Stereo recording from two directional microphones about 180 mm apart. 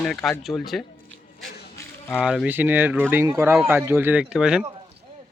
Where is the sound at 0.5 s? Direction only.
15° left (ahead or behind).